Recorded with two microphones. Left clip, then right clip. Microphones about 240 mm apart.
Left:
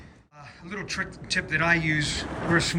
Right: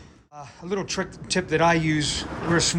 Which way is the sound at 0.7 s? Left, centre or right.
Centre.